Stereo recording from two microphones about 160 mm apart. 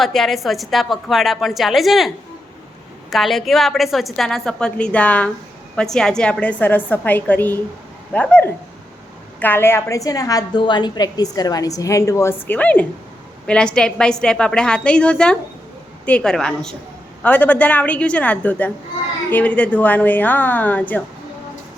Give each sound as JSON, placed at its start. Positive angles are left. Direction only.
{"t": 0.0, "sound": "a woman's voice", "side_deg": 0}